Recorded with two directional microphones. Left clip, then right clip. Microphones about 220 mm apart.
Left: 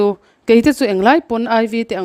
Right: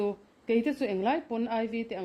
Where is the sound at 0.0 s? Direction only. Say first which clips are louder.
Left 16 dB; 50° left (ahead or behind).